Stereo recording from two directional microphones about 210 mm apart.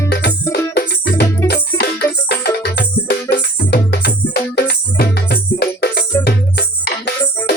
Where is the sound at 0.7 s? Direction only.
50° left (ahead or behind).